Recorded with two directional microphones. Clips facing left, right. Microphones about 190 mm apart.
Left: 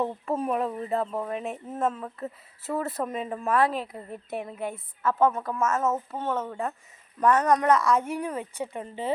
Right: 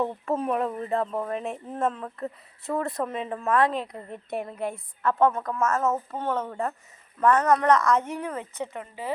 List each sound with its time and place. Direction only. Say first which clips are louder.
0.0 s speech: right 1 dB; 10° left (ahead or behind)
8.8 s speech: left 6 dB; 25° left (ahead or behind)